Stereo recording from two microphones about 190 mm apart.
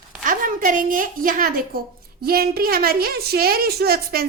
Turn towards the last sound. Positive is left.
turn(degrees=-50)  # may be behind; listen again after turning